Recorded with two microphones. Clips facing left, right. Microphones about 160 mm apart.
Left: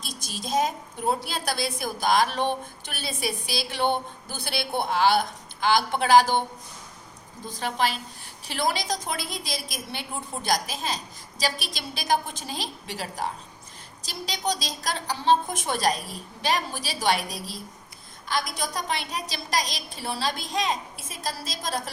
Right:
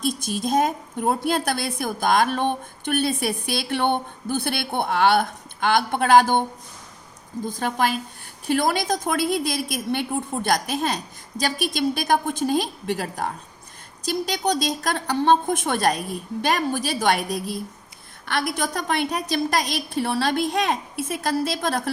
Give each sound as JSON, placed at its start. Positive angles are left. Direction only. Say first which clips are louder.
{"t": 0.0, "sound": "a woman's voice", "louder": "right 12 dB", "side_deg": -50}
{"t": 7.6, "sound": "a woman's voice", "louder": "right 3 dB", "side_deg": -50}